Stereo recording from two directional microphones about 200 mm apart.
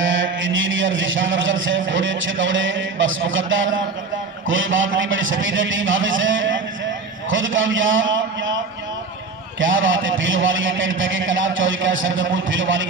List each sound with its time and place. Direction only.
0.0 s a man's voice: 70° right (ahead or behind)
9.6 s a man's voice: 75° right (ahead or behind)